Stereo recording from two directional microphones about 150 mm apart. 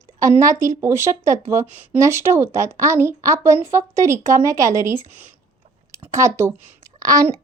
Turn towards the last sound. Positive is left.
turn(degrees=-20)  # may be behind; listen again after turning